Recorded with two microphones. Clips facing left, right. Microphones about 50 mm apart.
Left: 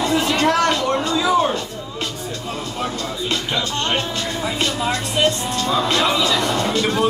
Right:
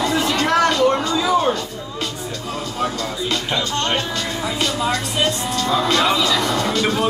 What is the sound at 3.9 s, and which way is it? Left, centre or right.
Music, left.